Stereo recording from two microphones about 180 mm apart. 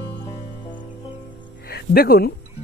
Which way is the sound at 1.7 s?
60° left (ahead or behind).